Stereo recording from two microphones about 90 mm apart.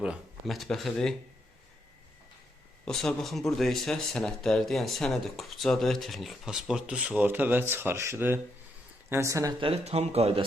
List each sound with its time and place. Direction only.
0.4 s speech: centre (ahead or behind)
2.8 s speech: 5° left (ahead or behind); by 9.3 s 25° right (ahead or behind)
9.3 s speech: 35° right (ahead or behind)
9.9 s a man's voice: 90° right